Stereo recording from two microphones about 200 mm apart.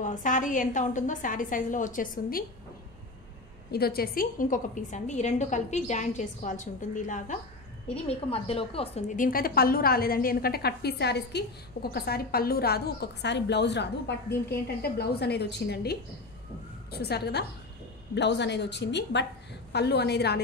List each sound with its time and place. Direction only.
0.0 s a woman's voice: 40° left (ahead or behind)
3.7 s a woman's voice: 50° left (ahead or behind)